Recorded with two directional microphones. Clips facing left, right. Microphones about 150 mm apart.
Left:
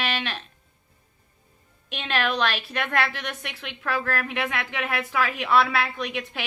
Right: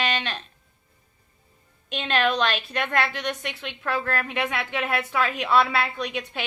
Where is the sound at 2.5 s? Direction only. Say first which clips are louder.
Right 1 dB; 5° left (ahead or behind).